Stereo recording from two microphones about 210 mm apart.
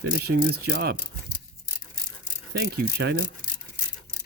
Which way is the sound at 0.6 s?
50° right (ahead or behind).